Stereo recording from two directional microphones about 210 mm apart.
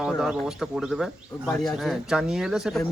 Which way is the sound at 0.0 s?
5° right (ahead or behind).